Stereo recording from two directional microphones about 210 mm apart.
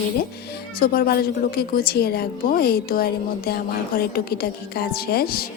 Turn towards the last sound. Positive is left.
turn(degrees=45)  # may be behind; listen again after turning